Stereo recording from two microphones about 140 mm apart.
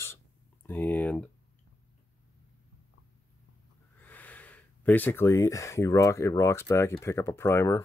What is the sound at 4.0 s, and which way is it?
Speech, 10° left (ahead or behind).